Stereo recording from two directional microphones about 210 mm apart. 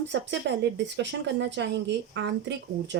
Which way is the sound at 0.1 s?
55° right (ahead or behind).